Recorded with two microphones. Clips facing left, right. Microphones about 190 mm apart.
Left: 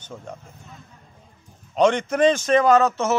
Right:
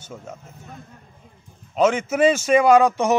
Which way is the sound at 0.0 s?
5° right (ahead or behind).